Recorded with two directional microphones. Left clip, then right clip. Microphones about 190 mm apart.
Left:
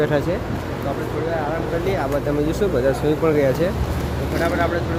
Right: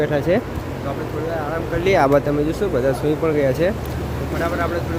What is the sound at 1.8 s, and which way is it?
Speech, 55° right (ahead or behind).